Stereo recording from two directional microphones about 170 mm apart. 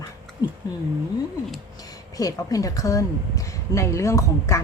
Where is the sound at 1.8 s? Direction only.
20° left (ahead or behind).